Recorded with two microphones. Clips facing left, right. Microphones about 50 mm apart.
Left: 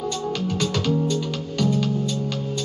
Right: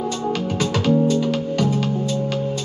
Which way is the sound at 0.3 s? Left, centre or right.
Centre.